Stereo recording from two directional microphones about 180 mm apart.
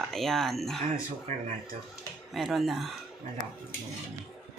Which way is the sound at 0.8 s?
45° right (ahead or behind).